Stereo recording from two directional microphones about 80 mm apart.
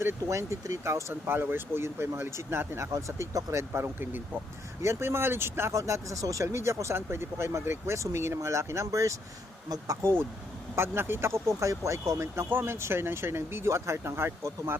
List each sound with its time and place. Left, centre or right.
0.0 s speech: right
10.0 s speech: right